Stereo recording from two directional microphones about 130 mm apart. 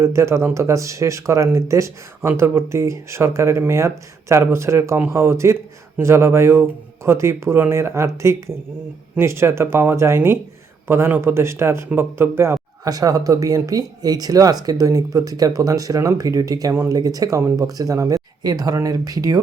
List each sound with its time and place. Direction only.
0.0 s a man's voice: 20° right (ahead or behind)